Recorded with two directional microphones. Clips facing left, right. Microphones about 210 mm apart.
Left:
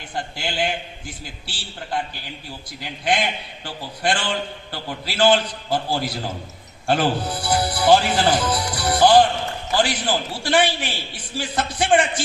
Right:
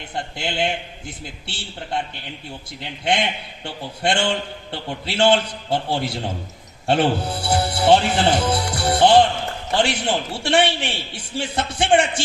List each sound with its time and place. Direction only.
0.3 s a man's voice: 25° right (ahead or behind)